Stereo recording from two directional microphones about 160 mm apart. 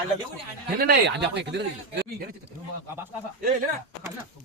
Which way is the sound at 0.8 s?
80° right.